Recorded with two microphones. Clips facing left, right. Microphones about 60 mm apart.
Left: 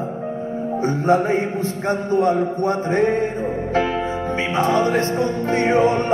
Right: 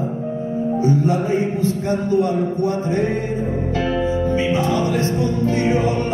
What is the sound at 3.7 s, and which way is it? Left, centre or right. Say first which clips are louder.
Music: even; left.